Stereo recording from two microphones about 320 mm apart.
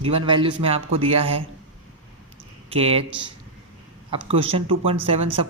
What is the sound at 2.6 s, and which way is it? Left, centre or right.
Speech, centre.